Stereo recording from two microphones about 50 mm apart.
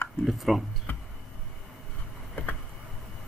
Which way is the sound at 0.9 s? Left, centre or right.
Left.